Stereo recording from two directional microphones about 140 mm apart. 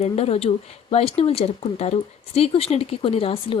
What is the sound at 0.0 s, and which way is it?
Speech, 50° left (ahead or behind).